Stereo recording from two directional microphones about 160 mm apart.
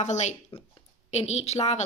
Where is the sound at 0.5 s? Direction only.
25° left (ahead or behind).